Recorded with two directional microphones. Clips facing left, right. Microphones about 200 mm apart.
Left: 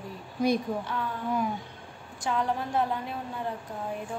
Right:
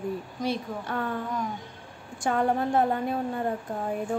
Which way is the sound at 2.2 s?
50° right (ahead or behind).